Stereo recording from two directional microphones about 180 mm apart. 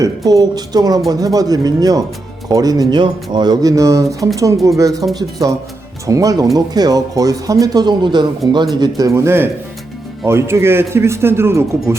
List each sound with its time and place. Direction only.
0.0 s speech: 20° right (ahead or behind)
6.1 s speech: 20° right (ahead or behind)